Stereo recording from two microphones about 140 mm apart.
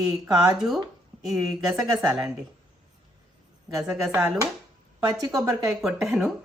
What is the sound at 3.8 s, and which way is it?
Speech, 5° right (ahead or behind).